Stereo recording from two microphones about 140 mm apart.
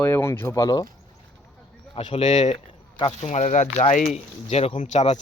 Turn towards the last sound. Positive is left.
turn(degrees=55)  # may be behind; listen again after turning